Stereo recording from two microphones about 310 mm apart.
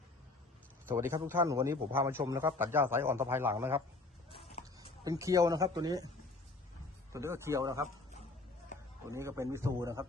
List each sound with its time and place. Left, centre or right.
0.9 s a man's voice: centre
4.3 s a sound: centre
5.0 s a man's voice: centre
7.1 s a man's voice: centre
9.0 s a man's voice: centre